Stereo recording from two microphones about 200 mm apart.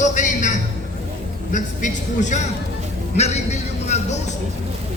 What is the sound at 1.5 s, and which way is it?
A man's voice, 40° left (ahead or behind).